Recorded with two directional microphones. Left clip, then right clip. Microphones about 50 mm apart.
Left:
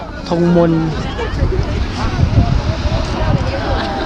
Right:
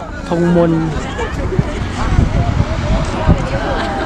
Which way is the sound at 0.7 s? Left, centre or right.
Right.